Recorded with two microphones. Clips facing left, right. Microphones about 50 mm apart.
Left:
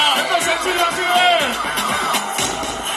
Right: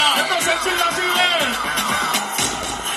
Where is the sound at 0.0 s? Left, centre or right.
Centre.